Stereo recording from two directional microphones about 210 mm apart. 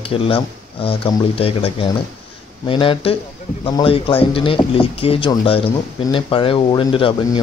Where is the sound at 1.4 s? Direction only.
25° left (ahead or behind).